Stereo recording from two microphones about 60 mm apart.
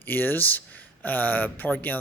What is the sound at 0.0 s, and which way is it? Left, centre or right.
Speech, left.